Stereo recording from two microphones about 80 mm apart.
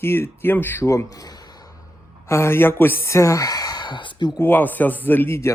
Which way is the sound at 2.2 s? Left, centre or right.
Left.